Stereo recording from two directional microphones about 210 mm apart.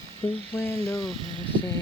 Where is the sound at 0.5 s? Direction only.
15° left (ahead or behind).